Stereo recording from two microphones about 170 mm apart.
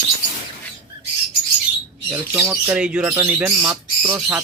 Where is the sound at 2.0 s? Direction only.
10° right (ahead or behind).